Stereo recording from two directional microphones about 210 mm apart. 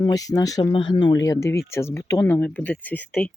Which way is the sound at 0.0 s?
15° left (ahead or behind).